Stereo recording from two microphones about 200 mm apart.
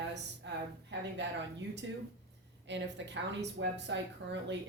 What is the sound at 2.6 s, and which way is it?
A woman's voice, 60° right (ahead or behind).